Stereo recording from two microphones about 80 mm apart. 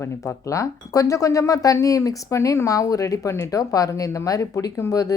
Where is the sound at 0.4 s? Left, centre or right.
Left.